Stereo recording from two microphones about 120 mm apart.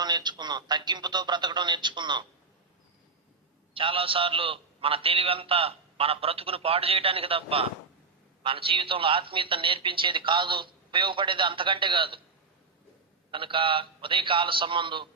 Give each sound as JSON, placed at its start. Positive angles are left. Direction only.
{"t": 0.0, "sound": "speech", "side_deg": -35}
{"t": 3.8, "sound": "a man's voice", "side_deg": -50}
{"t": 13.3, "sound": "a man's voice", "side_deg": -45}